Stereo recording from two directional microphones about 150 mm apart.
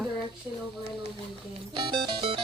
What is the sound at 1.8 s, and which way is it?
Music, 40° right (ahead or behind).